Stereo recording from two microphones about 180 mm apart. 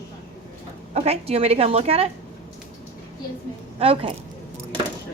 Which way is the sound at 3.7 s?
30° right (ahead or behind).